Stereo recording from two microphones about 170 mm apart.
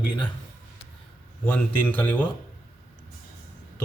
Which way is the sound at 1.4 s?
10° left (ahead or behind).